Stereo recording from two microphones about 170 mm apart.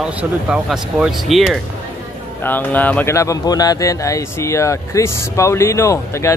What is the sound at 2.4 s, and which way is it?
Speech, 10° left (ahead or behind).